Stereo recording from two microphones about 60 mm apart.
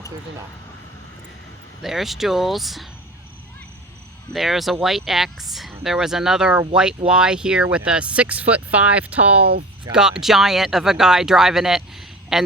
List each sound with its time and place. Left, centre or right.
1.8 s speech: centre
4.3 s speech: centre; by 9.4 s right
9.9 s speech: centre